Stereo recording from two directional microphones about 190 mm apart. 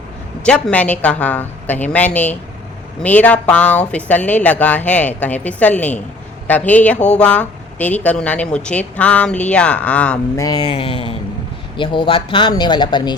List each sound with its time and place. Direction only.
0.4 s speech: 5° left (ahead or behind)
10.4 s speech: 20° left (ahead or behind)